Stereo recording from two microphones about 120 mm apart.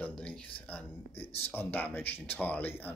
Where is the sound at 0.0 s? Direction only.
10° left (ahead or behind).